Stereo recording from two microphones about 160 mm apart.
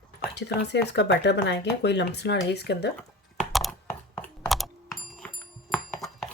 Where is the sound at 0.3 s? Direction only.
90° left.